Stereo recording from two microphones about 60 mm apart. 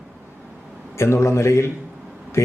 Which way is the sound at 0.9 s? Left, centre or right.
Left.